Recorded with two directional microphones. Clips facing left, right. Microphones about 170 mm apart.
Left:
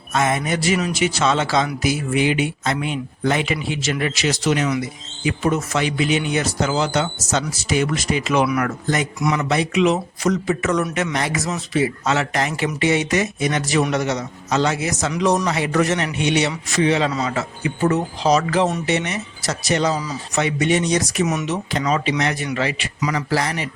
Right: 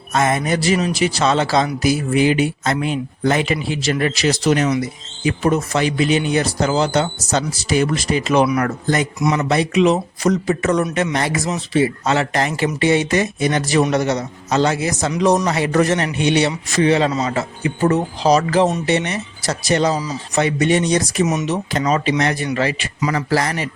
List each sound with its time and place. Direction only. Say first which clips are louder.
0.1 s speech: right 2 dB; 40° right (ahead or behind)
21.4 s speech: right 3 dB; 40° right (ahead or behind)